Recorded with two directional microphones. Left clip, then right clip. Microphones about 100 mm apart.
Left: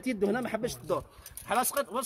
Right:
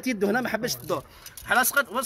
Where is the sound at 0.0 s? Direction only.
10° left (ahead or behind).